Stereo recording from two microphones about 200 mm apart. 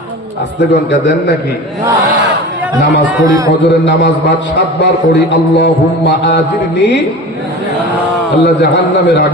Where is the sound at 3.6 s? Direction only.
60° left (ahead or behind).